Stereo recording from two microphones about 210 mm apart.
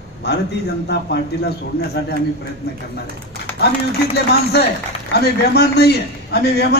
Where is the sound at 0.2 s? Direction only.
55° left (ahead or behind).